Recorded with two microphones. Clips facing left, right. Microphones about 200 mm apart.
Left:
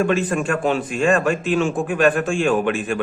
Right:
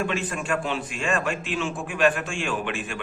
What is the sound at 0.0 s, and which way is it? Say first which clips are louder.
Speech: left 8 dB; 45° left (ahead or behind).